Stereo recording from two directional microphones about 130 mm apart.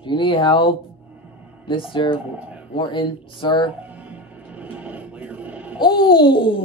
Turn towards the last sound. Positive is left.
turn(degrees=40)  # may be behind; listen again after turning